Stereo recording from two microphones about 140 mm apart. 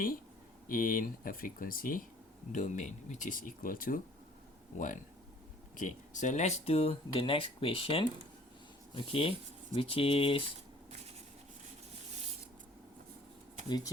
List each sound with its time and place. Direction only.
0.7 s speech: 90° left
2.5 s speech: 65° left (ahead or behind); by 4.0 s 80° left
5.7 s speech: 65° left (ahead or behind); by 10.4 s 40° left (ahead or behind)
13.7 s speech: 30° left (ahead or behind)